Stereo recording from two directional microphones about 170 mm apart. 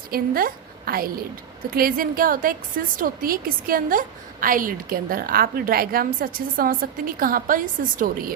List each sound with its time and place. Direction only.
0.1 s a woman's voice: 60° right (ahead or behind)